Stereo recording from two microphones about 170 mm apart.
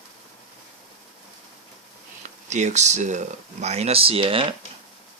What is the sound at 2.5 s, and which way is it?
Speech, 45° right (ahead or behind).